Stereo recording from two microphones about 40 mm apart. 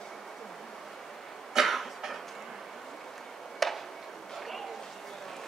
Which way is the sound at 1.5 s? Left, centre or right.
Centre.